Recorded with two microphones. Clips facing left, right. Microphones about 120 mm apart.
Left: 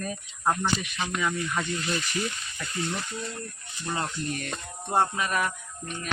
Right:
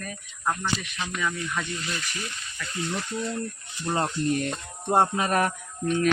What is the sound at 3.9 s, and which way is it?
Speech, 30° right (ahead or behind).